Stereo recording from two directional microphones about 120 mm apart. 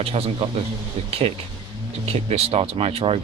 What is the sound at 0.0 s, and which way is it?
Speech, 55° right (ahead or behind).